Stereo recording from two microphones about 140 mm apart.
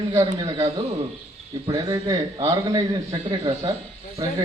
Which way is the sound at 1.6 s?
30° right (ahead or behind).